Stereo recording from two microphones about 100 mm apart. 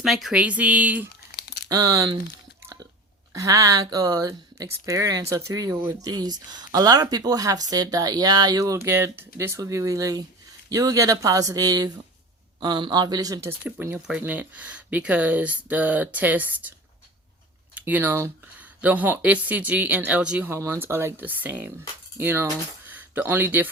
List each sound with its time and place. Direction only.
0.0 s speech: 5° right (ahead or behind)
1.6 s speech: 35° right (ahead or behind)
3.3 s speech: 35° right (ahead or behind)
12.5 s speech: 50° right (ahead or behind)
13.9 s speech: 15° right (ahead or behind)
17.7 s speech: 15° right (ahead or behind)
20.5 s speech: 25° right (ahead or behind)
22.9 s a sound: 15° right (ahead or behind)